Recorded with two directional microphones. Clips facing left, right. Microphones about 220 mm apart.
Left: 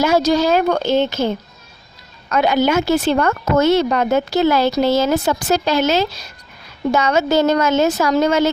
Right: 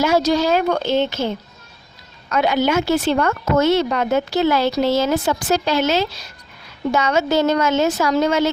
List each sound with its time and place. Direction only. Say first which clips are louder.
0.0 s a woman's voice: left 2 dB; 40° left (ahead or behind)
2.3 s a woman's voice: left 2 dB; 45° left (ahead or behind)